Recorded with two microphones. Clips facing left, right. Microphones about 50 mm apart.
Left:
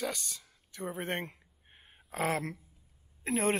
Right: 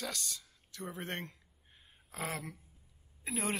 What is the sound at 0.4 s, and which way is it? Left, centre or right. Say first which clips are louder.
Speech: left 5 dB; left.